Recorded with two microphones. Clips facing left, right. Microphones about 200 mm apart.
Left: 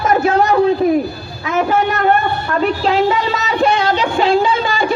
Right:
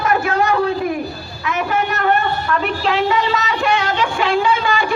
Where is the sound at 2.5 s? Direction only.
35° left (ahead or behind).